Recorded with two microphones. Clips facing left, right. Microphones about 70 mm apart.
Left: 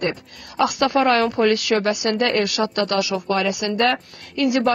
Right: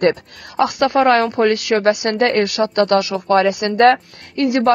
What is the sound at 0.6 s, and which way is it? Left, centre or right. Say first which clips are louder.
Speech: right 3 dB; right.